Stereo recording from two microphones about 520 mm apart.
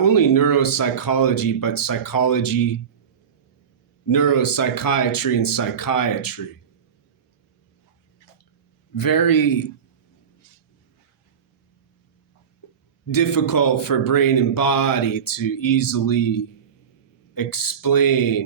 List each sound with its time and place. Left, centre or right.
0.0 s speech: left
4.1 s speech: left
9.0 s speech: left
13.1 s speech: left